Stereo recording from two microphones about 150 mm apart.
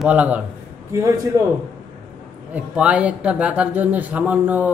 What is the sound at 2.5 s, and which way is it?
Speech, 10° right (ahead or behind).